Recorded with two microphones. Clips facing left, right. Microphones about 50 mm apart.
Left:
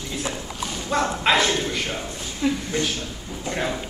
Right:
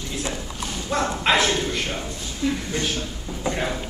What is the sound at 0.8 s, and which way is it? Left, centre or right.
Speech, centre.